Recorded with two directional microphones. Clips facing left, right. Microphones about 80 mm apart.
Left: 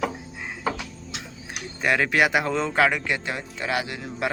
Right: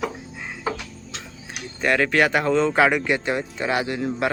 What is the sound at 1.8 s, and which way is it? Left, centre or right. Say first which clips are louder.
Speech: right 2 dB; centre.